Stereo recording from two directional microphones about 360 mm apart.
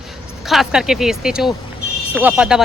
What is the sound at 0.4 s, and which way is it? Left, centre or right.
Speech, centre.